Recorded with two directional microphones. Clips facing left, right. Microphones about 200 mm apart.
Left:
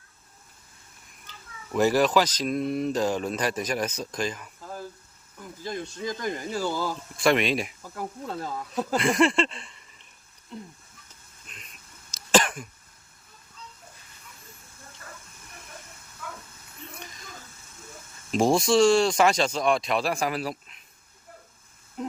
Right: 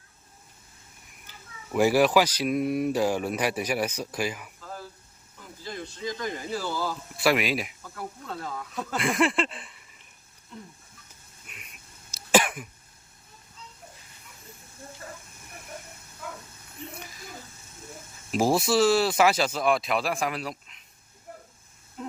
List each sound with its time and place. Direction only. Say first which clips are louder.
1.3 s speech: even; 10° right (ahead or behind)
5.6 s speech: left 2 dB; 45° left (ahead or behind)
7.2 s speech: left 2 dB; 5° right (ahead or behind)
7.9 s speech: left 4 dB; 35° left (ahead or behind)
9.0 s speech: left 2 dB; centre (ahead or behind)
11.4 s cough: even; 10° right (ahead or behind)
18.3 s speech: left 2 dB; 5° right (ahead or behind)